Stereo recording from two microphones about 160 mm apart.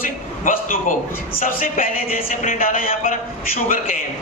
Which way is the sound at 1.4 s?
60° left (ahead or behind).